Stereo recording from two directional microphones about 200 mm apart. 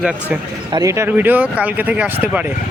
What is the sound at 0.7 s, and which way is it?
Speech, 15° right (ahead or behind).